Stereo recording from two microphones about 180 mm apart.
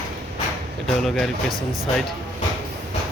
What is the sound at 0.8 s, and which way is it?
Speech, centre (ahead or behind).